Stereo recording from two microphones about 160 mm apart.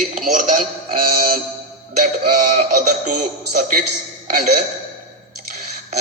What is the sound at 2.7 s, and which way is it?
A man's voice, 50° right (ahead or behind).